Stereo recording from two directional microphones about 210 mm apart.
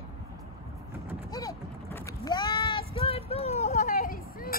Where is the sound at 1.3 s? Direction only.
15° left (ahead or behind).